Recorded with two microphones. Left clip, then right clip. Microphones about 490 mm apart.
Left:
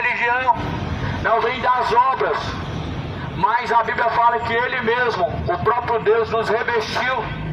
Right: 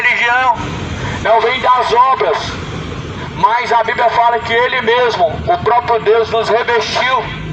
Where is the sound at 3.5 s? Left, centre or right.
Left.